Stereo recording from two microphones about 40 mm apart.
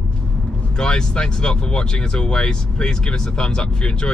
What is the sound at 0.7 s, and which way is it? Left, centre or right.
Speech, left.